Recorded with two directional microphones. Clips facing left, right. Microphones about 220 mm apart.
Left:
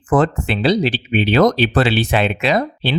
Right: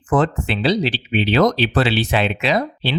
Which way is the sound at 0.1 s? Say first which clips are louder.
Left 2 dB; 50° left (ahead or behind).